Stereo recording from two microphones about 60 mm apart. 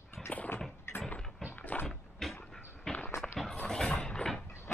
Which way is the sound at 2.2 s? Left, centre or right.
Centre.